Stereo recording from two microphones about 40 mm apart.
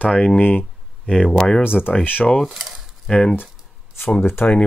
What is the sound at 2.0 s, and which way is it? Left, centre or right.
Speech, left.